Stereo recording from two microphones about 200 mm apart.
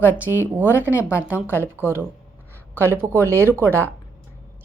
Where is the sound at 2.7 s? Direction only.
10° right (ahead or behind).